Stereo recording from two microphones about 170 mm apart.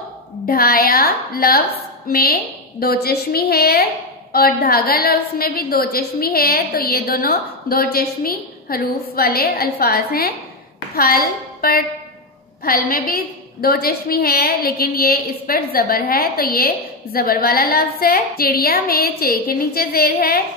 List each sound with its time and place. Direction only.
0.5 s a woman's voice: 60° left (ahead or behind)